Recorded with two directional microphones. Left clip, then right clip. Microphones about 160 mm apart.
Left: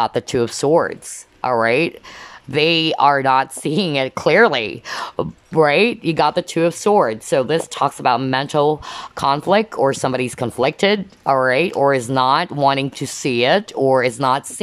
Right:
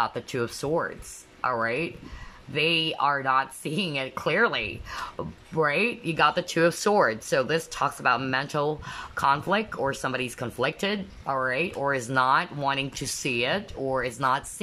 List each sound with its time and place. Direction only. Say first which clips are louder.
0.0 s speech: left 9 dB; 35° left (ahead or behind)